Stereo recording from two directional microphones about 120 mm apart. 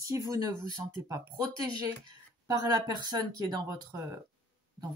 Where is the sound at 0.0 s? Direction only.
30° right (ahead or behind).